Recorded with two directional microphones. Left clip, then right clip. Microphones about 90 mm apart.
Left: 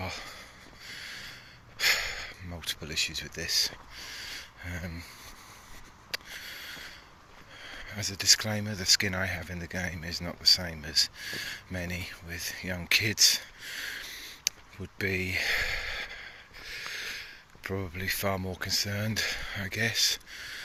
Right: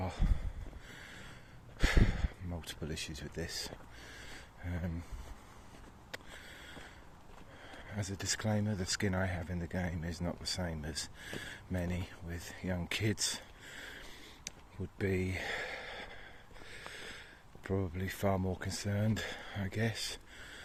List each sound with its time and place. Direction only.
0.0 s a sound: 35° right (ahead or behind)
2.9 s speech: 50° right (ahead or behind); by 4.8 s 25° right (ahead or behind)
6.1 s a sound: 40° right (ahead or behind)
6.4 s a sound: 25° right (ahead or behind)
7.9 s speech: 45° right (ahead or behind)
8.4 s speech: 25° right (ahead or behind)
8.7 s speech: 40° right (ahead or behind)
9.4 s speech: 25° right (ahead or behind)
10.8 s speech: 50° right (ahead or behind)
12.6 s speech: 25° right (ahead or behind)
14.5 s a sound: 25° right (ahead or behind)
17.9 s speech: 25° right (ahead or behind)
19.1 s speech: 35° right (ahead or behind)